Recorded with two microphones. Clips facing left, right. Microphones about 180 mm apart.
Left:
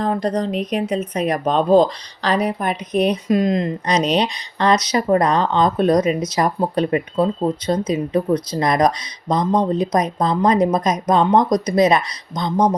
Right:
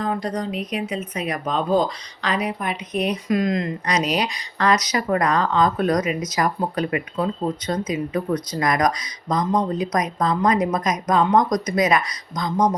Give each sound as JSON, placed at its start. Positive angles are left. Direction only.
{"t": 0.0, "sound": "a woman's voice", "side_deg": 35}